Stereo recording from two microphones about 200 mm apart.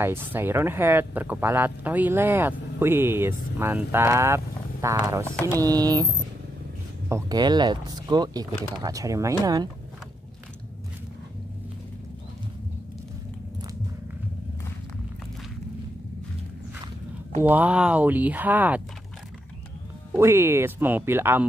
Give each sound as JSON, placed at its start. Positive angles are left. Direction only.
{"t": 0.0, "sound": "speech", "side_deg": -10}
{"t": 7.1, "sound": "speech", "side_deg": -15}
{"t": 17.4, "sound": "speech", "side_deg": -10}
{"t": 20.1, "sound": "speech", "side_deg": -15}